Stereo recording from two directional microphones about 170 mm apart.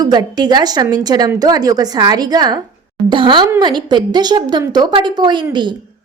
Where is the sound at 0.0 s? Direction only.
25° right (ahead or behind).